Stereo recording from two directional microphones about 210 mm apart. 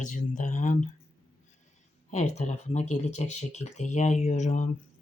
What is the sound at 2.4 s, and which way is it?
Speech, 35° left (ahead or behind).